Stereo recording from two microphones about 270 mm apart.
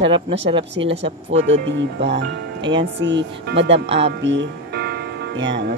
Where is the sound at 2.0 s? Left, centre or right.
Right.